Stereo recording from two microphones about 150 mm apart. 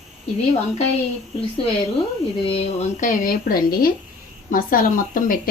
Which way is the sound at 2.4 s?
40° left (ahead or behind).